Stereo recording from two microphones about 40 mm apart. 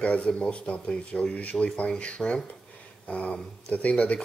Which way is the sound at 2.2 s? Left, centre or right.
Left.